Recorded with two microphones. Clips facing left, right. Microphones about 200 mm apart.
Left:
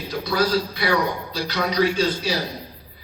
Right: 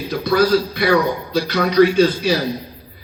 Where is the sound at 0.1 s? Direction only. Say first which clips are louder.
Right 6 dB; 55° right (ahead or behind).